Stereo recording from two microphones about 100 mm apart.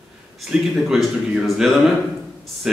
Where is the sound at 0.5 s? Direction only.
5° right (ahead or behind).